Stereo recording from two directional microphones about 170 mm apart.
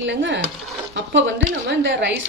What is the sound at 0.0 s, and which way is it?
Speech, 90° right.